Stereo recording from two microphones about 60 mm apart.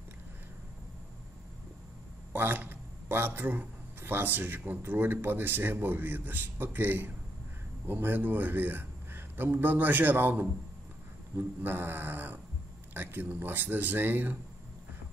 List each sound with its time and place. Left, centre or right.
2.3 s a man's voice: right